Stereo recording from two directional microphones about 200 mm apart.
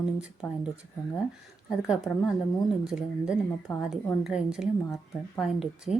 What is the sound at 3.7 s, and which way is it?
Speech, 20° left (ahead or behind).